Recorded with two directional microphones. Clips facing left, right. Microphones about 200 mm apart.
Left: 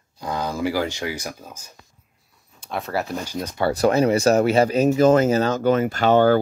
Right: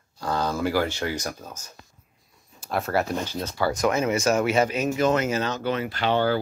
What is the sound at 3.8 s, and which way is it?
Speech, 35° left (ahead or behind).